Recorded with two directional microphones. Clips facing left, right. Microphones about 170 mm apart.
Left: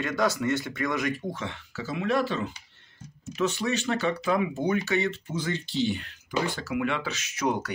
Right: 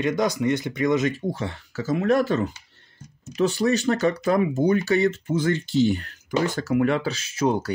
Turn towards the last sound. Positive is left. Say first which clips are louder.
# right 5 dB
turn(degrees=-30)  # may be behind; listen again after turning